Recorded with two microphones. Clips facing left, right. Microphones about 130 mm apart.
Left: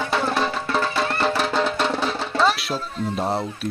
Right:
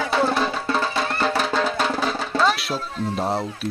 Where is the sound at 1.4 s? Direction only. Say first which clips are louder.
Even; centre (ahead or behind).